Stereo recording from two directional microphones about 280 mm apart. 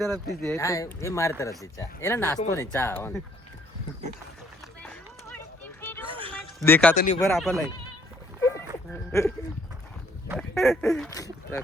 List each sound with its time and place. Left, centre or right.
0.3 s speech: centre
5.8 s a sound: centre
6.1 s a sound: centre
6.6 s duck: centre
6.9 s speech: left
7.2 s duck: centre
8.4 s a sound: centre
9.1 s speech: centre
10.5 s duck: centre
11.1 s speech: centre